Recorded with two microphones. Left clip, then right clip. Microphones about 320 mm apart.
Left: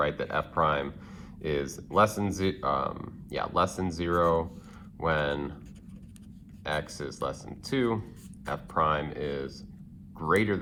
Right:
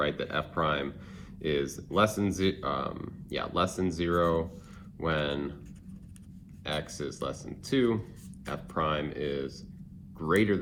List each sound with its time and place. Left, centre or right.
0.0 s speech: centre
6.9 s speech: centre